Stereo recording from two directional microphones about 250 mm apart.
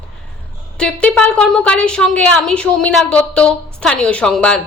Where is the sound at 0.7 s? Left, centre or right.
Centre.